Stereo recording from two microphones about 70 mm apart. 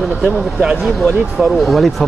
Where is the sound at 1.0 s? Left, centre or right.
Centre.